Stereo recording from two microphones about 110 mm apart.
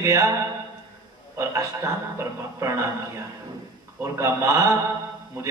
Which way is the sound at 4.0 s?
25° right (ahead or behind).